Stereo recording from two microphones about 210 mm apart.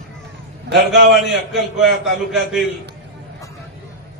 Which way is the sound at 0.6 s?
55° right (ahead or behind).